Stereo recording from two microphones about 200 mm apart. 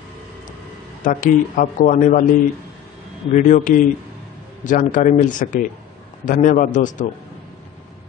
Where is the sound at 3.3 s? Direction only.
35° left (ahead or behind).